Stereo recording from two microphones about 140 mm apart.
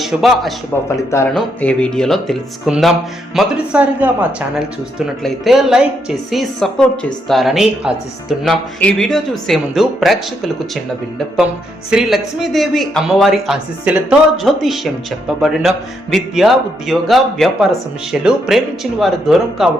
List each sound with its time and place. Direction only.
0.0 s speech: centre (ahead or behind)
0.9 s speech: 20° left (ahead or behind)
1.3 s speech: 5° left (ahead or behind)
11.9 s speech: 5° right (ahead or behind)
14.3 s speech: centre (ahead or behind)